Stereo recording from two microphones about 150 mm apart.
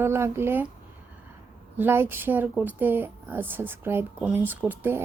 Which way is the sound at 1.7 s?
15° right (ahead or behind).